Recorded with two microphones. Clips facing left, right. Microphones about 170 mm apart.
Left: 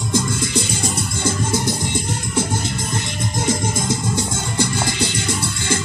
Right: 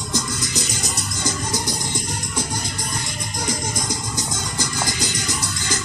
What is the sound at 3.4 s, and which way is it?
Music, 25° left (ahead or behind).